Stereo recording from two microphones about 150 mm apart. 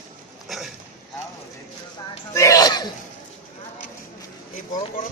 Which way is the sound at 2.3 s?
20° left (ahead or behind).